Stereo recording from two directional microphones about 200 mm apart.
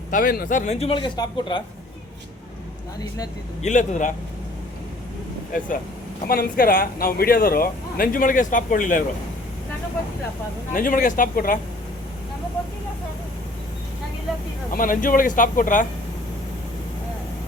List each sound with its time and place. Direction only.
0.1 s a man's voice: 45° left (ahead or behind); by 1.6 s 20° left (ahead or behind)
3.6 s a man's voice: 40° left (ahead or behind)
6.2 s speech: 45° left (ahead or behind)
10.8 s speech: 40° left (ahead or behind)
14.7 s a man's voice: 45° left (ahead or behind)